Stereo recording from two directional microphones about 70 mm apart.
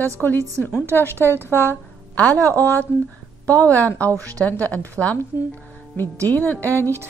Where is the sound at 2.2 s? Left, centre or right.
Right.